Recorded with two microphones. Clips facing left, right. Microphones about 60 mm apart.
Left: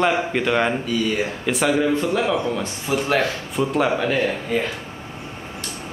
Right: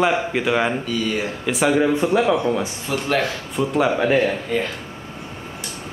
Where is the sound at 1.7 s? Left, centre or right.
Centre.